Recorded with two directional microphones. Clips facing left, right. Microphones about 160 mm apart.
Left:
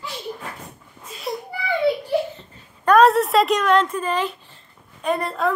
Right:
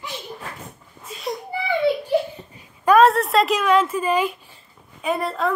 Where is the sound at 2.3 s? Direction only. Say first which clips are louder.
Right 3 dB; 10° right (ahead or behind).